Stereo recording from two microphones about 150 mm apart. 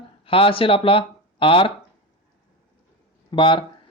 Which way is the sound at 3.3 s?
35° left (ahead or behind).